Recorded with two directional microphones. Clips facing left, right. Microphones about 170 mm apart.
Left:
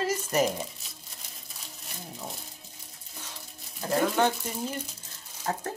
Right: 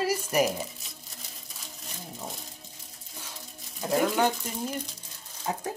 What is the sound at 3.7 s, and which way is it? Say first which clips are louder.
Speech: even; 5° right (ahead or behind).